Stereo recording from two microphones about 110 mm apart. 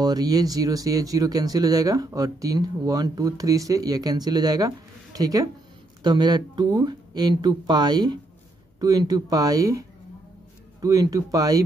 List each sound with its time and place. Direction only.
0.0 s speech: 35° right (ahead or behind)